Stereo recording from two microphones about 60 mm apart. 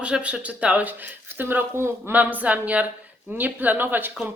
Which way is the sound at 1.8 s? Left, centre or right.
Right.